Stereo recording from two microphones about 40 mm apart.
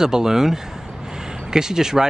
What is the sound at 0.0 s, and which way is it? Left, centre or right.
Speech, centre.